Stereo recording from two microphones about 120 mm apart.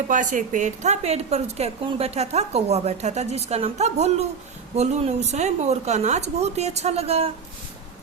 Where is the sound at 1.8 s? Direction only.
50° right (ahead or behind).